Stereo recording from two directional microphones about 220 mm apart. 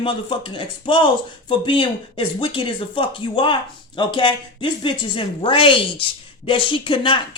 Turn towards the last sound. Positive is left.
turn(degrees=25)  # may be behind; listen again after turning